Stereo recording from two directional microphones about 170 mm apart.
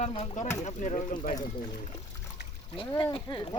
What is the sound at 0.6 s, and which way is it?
Speech, 40° left (ahead or behind).